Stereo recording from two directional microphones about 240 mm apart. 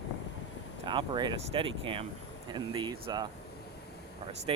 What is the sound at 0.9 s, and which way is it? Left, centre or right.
Speech, centre.